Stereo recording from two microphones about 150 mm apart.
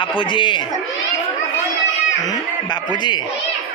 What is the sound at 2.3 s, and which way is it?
A man's voice, 30° left (ahead or behind).